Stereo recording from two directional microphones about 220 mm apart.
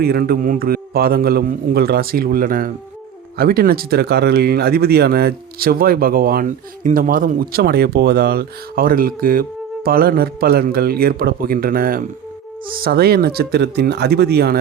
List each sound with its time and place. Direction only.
0.0 s speech: 45° right (ahead or behind)